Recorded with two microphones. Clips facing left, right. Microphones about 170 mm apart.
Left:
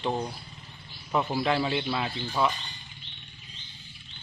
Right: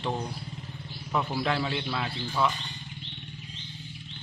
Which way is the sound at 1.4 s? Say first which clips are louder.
Left 3 dB; 5° left (ahead or behind).